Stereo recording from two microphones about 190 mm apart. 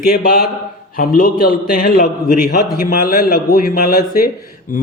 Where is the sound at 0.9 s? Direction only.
50° left (ahead or behind).